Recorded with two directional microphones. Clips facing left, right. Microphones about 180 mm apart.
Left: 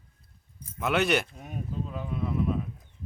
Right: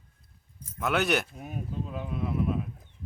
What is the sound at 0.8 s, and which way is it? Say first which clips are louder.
Speech: left 1 dB; centre (ahead or behind).